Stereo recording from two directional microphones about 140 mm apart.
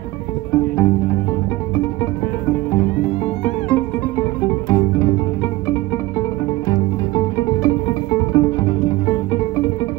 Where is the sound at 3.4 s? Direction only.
15° left (ahead or behind).